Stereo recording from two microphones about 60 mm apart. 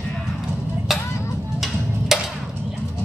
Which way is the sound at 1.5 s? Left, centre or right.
Centre.